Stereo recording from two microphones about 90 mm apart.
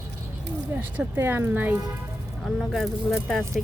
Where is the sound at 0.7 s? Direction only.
25° right (ahead or behind).